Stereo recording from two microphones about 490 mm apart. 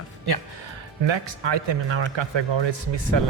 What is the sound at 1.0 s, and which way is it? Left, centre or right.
A man's voice, right.